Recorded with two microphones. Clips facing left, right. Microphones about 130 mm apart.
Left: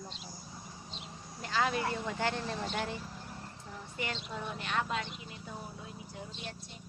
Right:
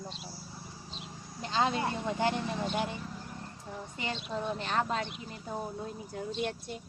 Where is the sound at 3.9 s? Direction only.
25° right (ahead or behind).